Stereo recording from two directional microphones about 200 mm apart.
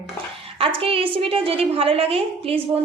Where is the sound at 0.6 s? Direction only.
30° right (ahead or behind).